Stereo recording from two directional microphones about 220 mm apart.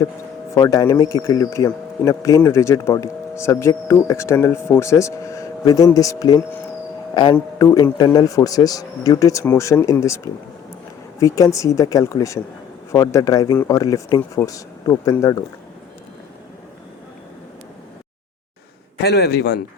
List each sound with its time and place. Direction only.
0.5 s speech: 15° left (ahead or behind)
11.2 s speech: 15° left (ahead or behind)
19.0 s a man's voice: 45° left (ahead or behind)